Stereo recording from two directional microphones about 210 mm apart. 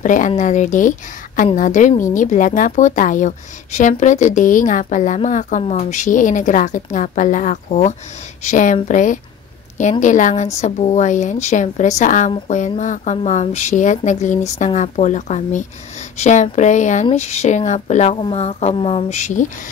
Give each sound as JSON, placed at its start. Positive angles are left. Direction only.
{"t": 0.0, "sound": "a woman's voice", "side_deg": 40}